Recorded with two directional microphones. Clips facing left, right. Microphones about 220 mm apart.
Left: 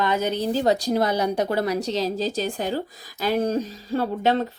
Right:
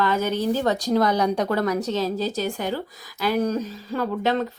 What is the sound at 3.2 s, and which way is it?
Speech, 25° left (ahead or behind).